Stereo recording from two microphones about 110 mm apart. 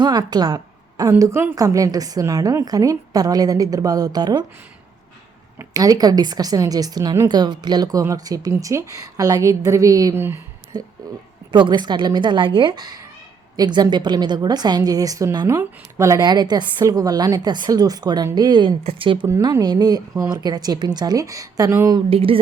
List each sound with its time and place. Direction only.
0.0 s a woman's voice: 40° right (ahead or behind)
1.2 s a woman's voice: 20° right (ahead or behind); by 4.4 s 40° right (ahead or behind)
5.7 s a woman's voice: 35° right (ahead or behind); by 19.3 s 50° right (ahead or behind)
19.4 s a woman's voice: 40° right (ahead or behind)
22.1 s speech: 55° right (ahead or behind)